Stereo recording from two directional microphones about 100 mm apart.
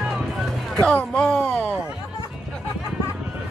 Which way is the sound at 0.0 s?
5° right (ahead or behind).